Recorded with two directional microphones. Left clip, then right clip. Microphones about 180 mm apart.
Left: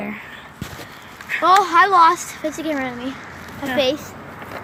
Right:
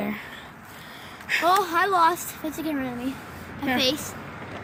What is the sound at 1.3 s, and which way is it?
Speech, 45° right (ahead or behind).